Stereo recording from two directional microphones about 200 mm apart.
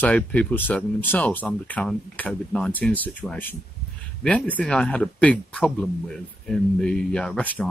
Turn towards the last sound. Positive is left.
turn(degrees=5)  # may be behind; listen again after turning